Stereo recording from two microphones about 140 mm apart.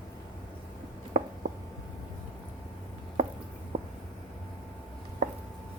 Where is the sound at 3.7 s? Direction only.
60° right (ahead or behind).